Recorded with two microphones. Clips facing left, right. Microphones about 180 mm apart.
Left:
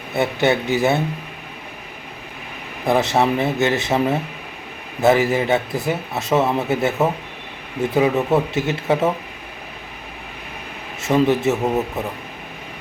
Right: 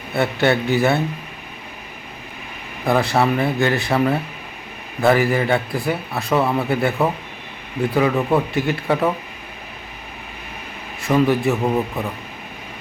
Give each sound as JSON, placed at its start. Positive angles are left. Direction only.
{"t": 0.1, "sound": "a man's voice", "side_deg": 20}
{"t": 2.8, "sound": "a man's voice", "side_deg": 20}
{"t": 11.0, "sound": "a man's voice", "side_deg": 20}